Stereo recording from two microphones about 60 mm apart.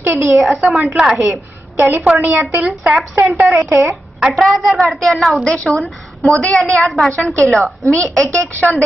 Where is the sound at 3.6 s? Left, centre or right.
Right.